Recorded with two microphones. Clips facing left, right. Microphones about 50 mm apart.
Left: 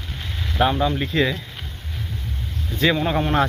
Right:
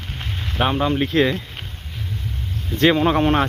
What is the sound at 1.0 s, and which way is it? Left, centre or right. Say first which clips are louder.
Speech: right 3 dB; right.